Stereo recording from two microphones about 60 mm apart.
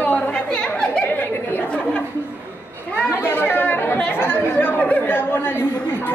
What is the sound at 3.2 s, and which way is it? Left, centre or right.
Speech, left.